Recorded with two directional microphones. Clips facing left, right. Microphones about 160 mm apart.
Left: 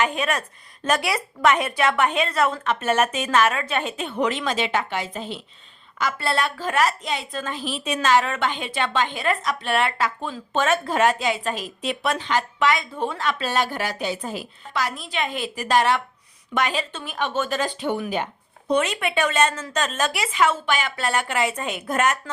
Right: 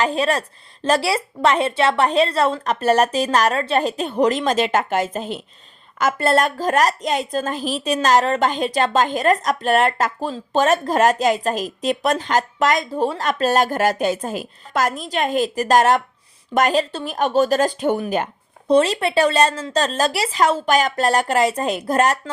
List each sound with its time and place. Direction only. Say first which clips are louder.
0.0 s a woman's voice: right 4 dB; 35° right (ahead or behind)
18.7 s a woman's voice: right 6 dB; 30° right (ahead or behind)